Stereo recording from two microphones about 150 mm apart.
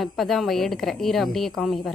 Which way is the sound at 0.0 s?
Centre (ahead or behind).